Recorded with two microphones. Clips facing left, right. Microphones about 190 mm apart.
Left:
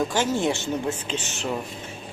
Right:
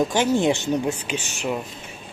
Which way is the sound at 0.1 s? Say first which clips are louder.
Right 4 dB; 15° right (ahead or behind).